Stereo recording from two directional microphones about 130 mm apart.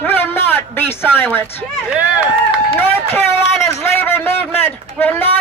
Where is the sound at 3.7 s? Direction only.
20° left (ahead or behind).